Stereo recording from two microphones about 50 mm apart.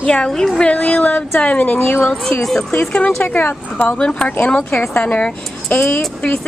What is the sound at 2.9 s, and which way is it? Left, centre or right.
Speech, left.